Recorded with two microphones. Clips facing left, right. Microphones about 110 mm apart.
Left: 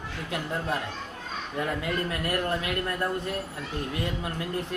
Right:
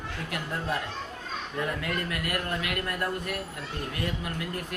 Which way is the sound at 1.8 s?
30° left (ahead or behind).